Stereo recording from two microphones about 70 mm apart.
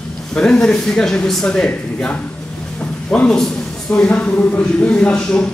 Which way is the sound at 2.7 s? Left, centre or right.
Centre.